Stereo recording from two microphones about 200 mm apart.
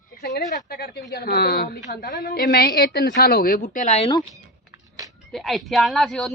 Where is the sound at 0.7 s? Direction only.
50° left (ahead or behind).